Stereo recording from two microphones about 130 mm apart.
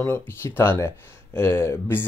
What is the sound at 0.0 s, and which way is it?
Speech, 15° left (ahead or behind).